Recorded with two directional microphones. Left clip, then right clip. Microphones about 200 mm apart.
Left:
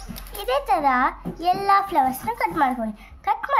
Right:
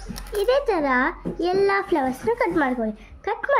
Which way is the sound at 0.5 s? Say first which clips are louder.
Left 4 dB; 55° left (ahead or behind).